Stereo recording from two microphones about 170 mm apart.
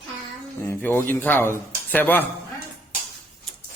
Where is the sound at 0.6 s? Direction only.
10° left (ahead or behind).